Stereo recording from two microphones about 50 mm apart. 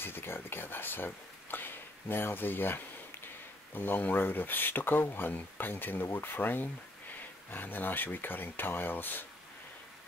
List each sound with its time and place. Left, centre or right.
0.0 s speech: left